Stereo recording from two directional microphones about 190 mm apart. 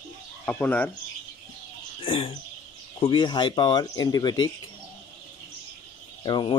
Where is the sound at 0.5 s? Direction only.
10° left (ahead or behind).